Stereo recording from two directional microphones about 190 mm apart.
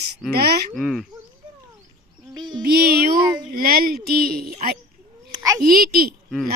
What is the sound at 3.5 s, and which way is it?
Speech, 50° right (ahead or behind).